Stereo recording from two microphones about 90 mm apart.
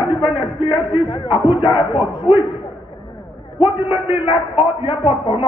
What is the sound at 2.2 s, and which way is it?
Speech, 65° left (ahead or behind).